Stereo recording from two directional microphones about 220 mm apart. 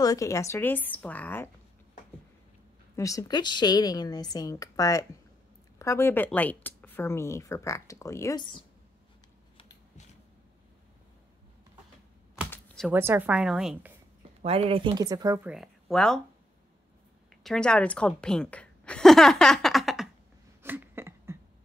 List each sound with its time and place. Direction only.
0.0 s a woman's voice: 15° left (ahead or behind)
3.0 s a woman's voice: 15° left (ahead or behind)
12.4 s computer keyboard: 5° left (ahead or behind)
12.9 s speech: 10° right (ahead or behind)
14.4 s speech: 25° right (ahead or behind)
15.5 s speech: centre (ahead or behind)
17.3 s a woman's voice: centre (ahead or behind)
20.6 s a sound: 10° right (ahead or behind)